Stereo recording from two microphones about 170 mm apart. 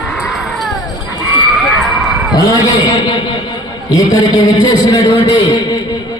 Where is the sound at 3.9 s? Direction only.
25° left (ahead or behind).